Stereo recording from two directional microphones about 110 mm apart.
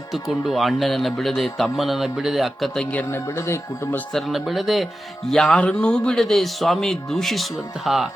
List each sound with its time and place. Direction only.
0.1 s speech: centre (ahead or behind)
2.9 s speech: 15° left (ahead or behind)
3.2 s speech: 25° left (ahead or behind)
4.1 s speech: centre (ahead or behind)